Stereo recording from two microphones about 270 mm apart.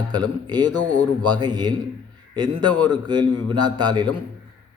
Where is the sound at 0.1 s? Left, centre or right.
Centre.